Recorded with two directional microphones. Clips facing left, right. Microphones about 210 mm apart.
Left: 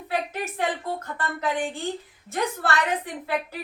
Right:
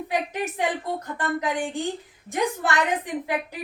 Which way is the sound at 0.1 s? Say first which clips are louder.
Even; 15° right (ahead or behind).